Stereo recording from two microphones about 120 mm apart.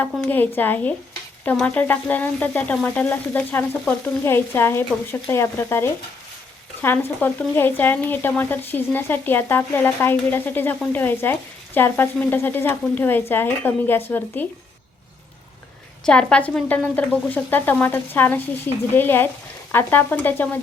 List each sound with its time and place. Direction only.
0.2 s speech: 15° left (ahead or behind)
16.0 s speech: 10° left (ahead or behind)